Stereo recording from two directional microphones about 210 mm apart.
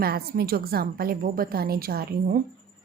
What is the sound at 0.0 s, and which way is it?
A woman's voice, 45° right (ahead or behind).